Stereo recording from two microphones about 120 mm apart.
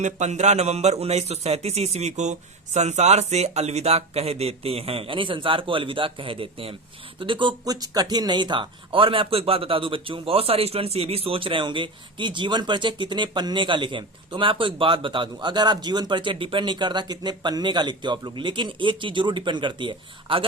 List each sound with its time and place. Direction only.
0.0 s a man's voice: 75° right (ahead or behind); by 20.4 s 45° right (ahead or behind)